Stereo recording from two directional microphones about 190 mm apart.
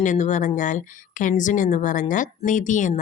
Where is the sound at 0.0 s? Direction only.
40° left (ahead or behind).